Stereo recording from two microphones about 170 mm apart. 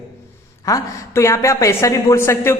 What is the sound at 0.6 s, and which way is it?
A woman's voice, 20° left (ahead or behind).